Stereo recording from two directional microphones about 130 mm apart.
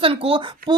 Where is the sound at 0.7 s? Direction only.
35° right (ahead or behind).